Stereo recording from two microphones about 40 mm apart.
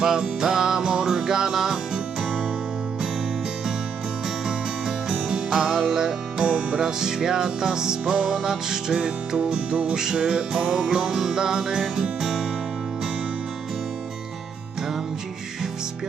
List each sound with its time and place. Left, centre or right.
0.0 s music: centre
4.4 s music: centre
6.4 s music: right